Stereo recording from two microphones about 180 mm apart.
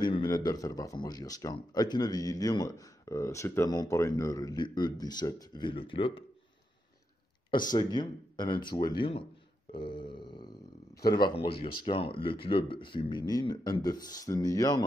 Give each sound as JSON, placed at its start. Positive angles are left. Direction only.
{"t": 0.0, "sound": "speech", "side_deg": 25}
{"t": 7.7, "sound": "speech", "side_deg": 25}